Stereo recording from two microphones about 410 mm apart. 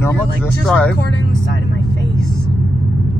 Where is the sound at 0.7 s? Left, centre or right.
Centre.